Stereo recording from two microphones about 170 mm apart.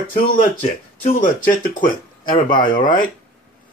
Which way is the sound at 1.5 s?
50° left (ahead or behind).